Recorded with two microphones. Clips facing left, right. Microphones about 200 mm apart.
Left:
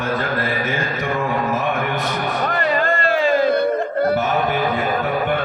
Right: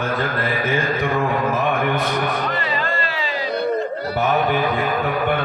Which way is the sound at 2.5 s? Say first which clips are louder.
Left 4 dB; 50° left (ahead or behind).